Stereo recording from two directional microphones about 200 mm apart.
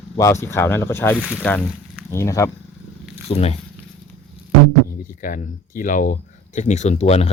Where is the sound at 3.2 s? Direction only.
30° left (ahead or behind).